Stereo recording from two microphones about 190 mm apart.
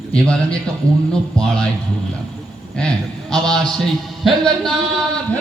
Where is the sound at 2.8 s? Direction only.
5° left (ahead or behind).